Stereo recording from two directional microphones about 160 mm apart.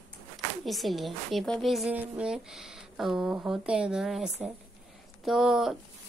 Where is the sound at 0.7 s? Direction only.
Centre (ahead or behind).